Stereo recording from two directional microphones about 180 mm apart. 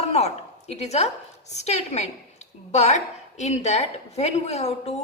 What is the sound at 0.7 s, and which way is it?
Speech, 35° left (ahead or behind).